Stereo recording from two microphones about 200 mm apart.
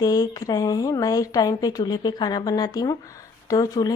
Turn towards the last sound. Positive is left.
turn(degrees=20)  # may be behind; listen again after turning